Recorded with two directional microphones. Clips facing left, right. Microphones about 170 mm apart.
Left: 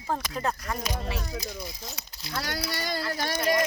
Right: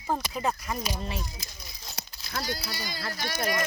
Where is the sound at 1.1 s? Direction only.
65° left (ahead or behind).